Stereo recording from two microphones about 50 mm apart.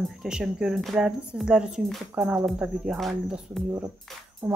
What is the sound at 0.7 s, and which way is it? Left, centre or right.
Speech, centre.